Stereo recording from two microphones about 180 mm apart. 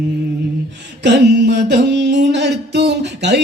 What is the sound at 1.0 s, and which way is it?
Mantra, 70° right (ahead or behind).